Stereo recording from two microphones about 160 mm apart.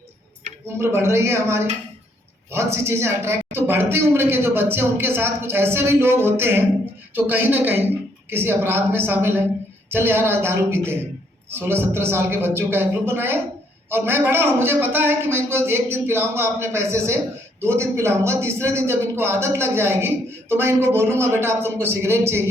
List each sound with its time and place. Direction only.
0.8 s a man's voice: 15° right (ahead or behind)